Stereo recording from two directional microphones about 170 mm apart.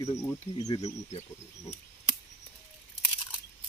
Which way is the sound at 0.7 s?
40° left (ahead or behind).